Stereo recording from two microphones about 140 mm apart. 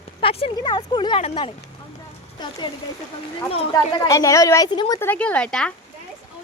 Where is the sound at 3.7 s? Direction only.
25° left (ahead or behind).